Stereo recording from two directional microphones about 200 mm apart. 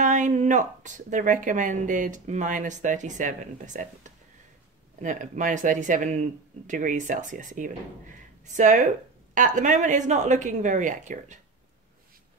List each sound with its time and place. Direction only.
0.0 s speech: 40° right (ahead or behind)